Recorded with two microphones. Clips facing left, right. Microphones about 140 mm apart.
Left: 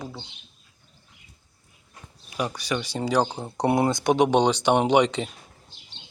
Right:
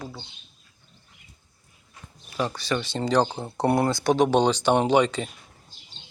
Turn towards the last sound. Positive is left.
turn(degrees=15)  # may be behind; listen again after turning